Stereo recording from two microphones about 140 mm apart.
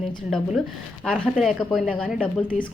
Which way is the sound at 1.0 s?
Centre (ahead or behind).